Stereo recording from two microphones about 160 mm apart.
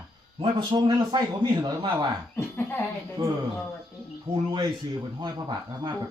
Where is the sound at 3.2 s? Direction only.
25° right (ahead or behind).